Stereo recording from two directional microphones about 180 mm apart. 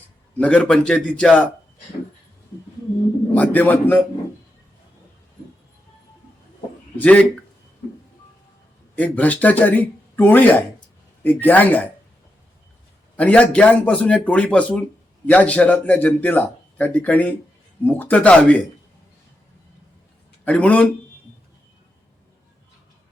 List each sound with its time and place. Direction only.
0.3 s a man's voice: 5° left (ahead or behind)
3.3 s speech: 10° left (ahead or behind)
7.0 s speech: 5° left (ahead or behind)
9.0 s speech: 10° left (ahead or behind)
13.1 s speech: 10° left (ahead or behind)
20.4 s speech: 5° left (ahead or behind)